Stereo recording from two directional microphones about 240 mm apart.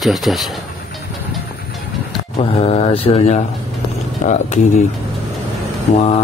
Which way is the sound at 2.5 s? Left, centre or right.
Left.